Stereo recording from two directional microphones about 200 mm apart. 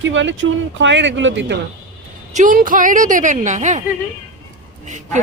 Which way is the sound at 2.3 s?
40° right (ahead or behind).